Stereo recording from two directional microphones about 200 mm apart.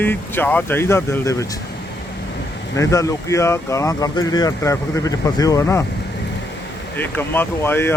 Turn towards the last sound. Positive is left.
turn(degrees=10)  # may be behind; listen again after turning